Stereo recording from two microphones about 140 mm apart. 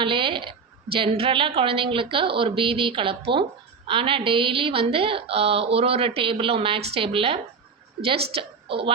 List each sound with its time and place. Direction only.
0.0 s a woman's voice: 35° right (ahead or behind)